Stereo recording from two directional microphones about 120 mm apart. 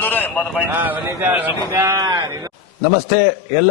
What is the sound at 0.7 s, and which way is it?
A man's voice, 15° right (ahead or behind).